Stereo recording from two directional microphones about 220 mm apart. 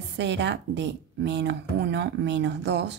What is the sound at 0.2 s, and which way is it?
Speech, 55° right (ahead or behind).